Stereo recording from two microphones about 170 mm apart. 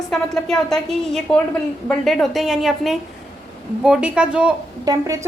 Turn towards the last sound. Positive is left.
turn(degrees=-20)  # may be behind; listen again after turning